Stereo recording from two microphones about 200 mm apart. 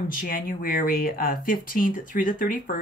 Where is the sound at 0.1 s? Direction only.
45° left (ahead or behind).